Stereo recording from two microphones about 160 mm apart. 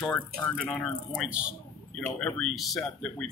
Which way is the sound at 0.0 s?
10° left (ahead or behind).